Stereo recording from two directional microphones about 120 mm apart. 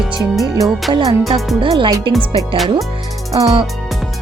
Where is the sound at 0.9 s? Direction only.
35° right (ahead or behind).